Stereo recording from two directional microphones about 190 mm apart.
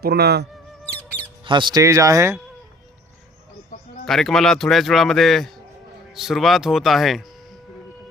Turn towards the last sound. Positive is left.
turn(degrees=0)  # may be behind; listen again after turning